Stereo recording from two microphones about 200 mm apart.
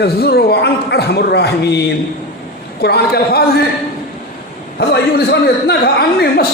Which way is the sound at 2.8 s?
55° left (ahead or behind).